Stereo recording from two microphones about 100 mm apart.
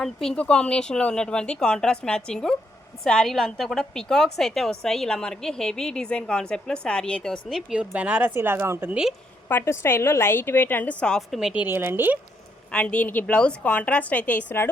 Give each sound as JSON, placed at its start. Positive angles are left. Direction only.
{"t": 0.0, "sound": "a woman's voice", "side_deg": 5}
{"t": 7.7, "sound": "speech", "side_deg": -10}
{"t": 8.9, "sound": "speech", "side_deg": -5}
{"t": 9.5, "sound": "a woman's voice", "side_deg": 25}
{"t": 11.3, "sound": "a woman's voice", "side_deg": -5}
{"t": 11.6, "sound": "speech", "side_deg": -20}
{"t": 12.7, "sound": "a woman's voice", "side_deg": 15}